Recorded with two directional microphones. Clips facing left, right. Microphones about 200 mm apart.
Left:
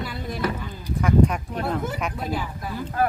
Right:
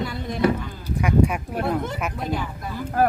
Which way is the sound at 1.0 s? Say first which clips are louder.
Left 1 dB; 10° right (ahead or behind).